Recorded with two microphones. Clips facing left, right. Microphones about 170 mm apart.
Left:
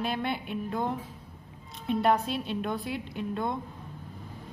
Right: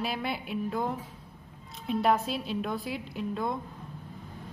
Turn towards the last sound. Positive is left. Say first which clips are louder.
# even
turn(degrees=0)  # may be behind; listen again after turning